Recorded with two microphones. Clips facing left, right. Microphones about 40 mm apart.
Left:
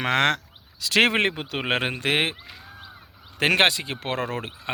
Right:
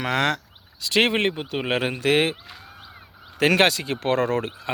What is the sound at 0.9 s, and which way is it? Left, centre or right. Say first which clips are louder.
Speech: even; left.